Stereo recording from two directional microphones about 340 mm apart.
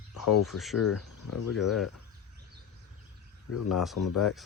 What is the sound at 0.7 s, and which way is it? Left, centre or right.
Speech, left.